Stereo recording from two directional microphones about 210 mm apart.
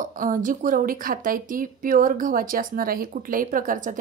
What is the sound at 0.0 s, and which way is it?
Speech, 40° right (ahead or behind).